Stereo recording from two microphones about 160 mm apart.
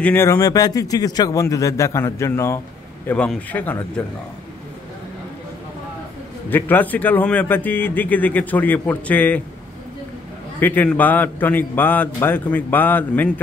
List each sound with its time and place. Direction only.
0.0 s a man's voice: 15° left (ahead or behind)
6.5 s a man's voice: 10° left (ahead or behind)
10.6 s a man's voice: 10° left (ahead or behind)